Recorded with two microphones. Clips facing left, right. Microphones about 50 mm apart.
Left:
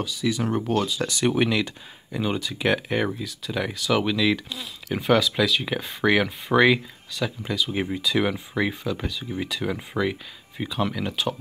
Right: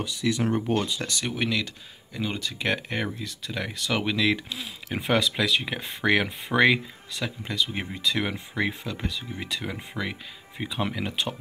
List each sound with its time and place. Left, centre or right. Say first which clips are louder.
0.2 s speech: left 1 dB; centre
1.0 s speech: left 6 dB; centre
2.1 s speech: left 4 dB; centre